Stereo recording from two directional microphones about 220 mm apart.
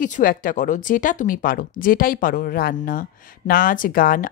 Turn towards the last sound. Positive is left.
turn(degrees=40)  # may be behind; listen again after turning